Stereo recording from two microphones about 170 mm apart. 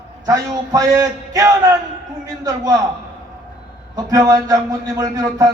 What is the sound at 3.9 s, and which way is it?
A man's voice, 20° right (ahead or behind).